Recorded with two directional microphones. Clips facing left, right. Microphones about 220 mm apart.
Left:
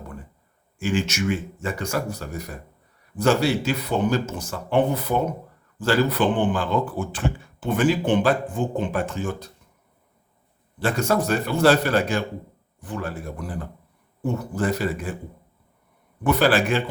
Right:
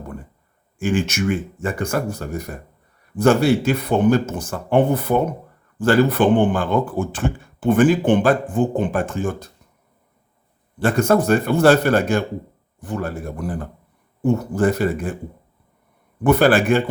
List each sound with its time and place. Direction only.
0.8 s speech: 55° right (ahead or behind)
10.8 s speech: 55° right (ahead or behind)
16.2 s speech: 50° right (ahead or behind)